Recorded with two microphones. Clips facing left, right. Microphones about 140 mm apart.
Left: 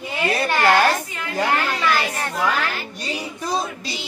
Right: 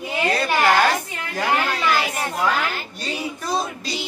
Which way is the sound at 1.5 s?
15° right (ahead or behind).